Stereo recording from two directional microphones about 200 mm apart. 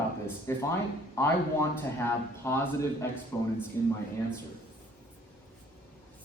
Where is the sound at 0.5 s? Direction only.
15° left (ahead or behind).